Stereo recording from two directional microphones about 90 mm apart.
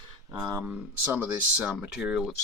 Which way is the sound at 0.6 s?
20° right (ahead or behind).